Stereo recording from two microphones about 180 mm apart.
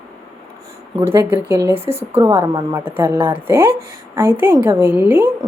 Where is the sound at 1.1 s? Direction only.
15° right (ahead or behind).